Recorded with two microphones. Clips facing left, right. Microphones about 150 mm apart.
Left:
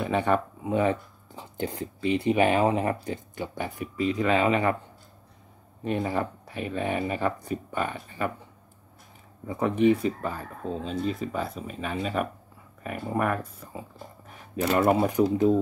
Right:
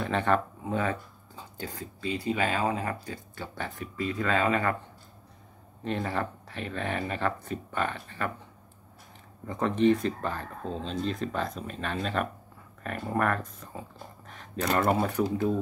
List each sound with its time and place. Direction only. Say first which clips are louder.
0.0 s speech: left 2 dB; 10° left (ahead or behind)
3.5 s speech: left 3 dB; 15° left (ahead or behind)
5.9 s speech: left 3 dB; 10° left (ahead or behind)
9.5 s speech: left 2 dB; 10° left (ahead or behind)